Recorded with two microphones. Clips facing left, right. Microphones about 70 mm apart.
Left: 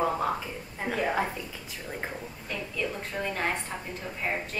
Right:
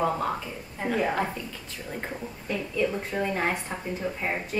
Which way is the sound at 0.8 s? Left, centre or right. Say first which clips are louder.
Right 3 dB; centre.